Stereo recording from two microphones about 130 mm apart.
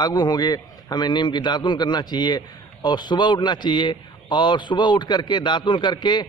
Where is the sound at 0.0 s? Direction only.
30° left (ahead or behind).